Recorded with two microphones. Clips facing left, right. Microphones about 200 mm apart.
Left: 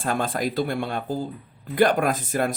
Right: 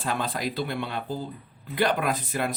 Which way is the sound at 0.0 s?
50° left (ahead or behind).